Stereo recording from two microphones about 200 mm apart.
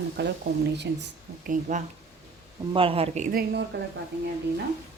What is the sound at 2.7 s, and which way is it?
Speech, 25° right (ahead or behind).